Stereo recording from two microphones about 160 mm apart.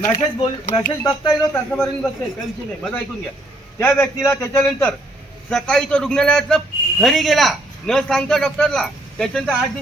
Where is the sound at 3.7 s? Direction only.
15° left (ahead or behind).